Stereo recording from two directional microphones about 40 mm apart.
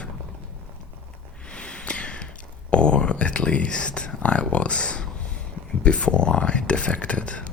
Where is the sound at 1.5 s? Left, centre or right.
Left.